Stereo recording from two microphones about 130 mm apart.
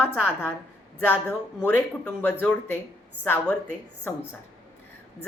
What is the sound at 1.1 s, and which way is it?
A woman's voice, 15° left (ahead or behind).